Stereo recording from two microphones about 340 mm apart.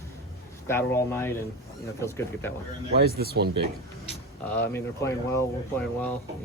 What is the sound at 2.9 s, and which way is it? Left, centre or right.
Speech, right.